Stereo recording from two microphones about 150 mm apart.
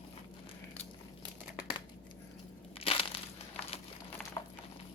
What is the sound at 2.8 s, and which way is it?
Crushing, 40° left (ahead or behind).